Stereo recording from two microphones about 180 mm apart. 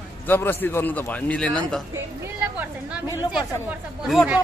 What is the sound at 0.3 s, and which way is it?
A man's voice, 10° left (ahead or behind).